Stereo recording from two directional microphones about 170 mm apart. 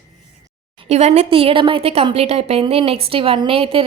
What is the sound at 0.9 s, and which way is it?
A woman's voice, 40° right (ahead or behind).